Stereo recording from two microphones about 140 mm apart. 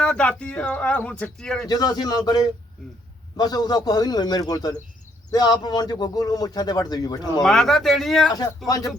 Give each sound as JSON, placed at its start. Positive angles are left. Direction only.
{"t": 0.0, "sound": "speech", "side_deg": 5}
{"t": 1.6, "sound": "a man's voice", "side_deg": 30}
{"t": 7.4, "sound": "a man's voice", "side_deg": 5}
{"t": 8.3, "sound": "a man's voice", "side_deg": 30}